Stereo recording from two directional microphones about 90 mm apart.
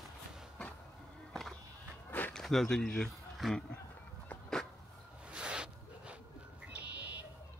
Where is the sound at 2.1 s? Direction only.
20° left (ahead or behind).